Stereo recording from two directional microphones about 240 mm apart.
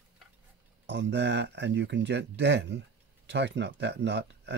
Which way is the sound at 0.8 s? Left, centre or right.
Right.